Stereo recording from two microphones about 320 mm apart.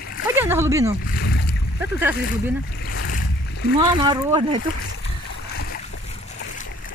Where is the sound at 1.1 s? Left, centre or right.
Left.